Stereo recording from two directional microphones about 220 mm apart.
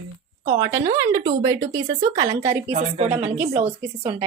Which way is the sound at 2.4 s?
30° right (ahead or behind).